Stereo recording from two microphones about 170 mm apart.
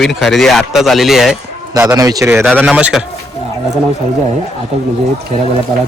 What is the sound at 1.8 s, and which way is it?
Speech, 20° right (ahead or behind).